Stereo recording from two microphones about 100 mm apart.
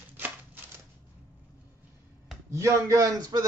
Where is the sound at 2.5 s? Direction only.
30° right (ahead or behind).